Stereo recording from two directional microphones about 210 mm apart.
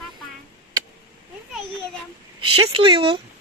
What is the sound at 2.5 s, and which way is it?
Speech, 25° right (ahead or behind).